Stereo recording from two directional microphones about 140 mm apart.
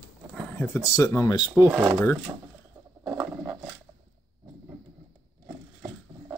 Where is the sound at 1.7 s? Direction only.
5° right (ahead or behind).